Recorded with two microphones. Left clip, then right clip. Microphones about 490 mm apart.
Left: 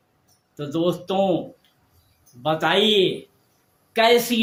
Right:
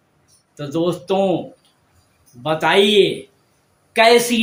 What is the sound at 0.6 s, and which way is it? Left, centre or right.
Speech, left.